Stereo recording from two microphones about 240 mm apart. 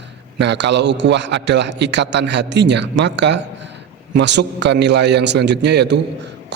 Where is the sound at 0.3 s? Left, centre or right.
Right.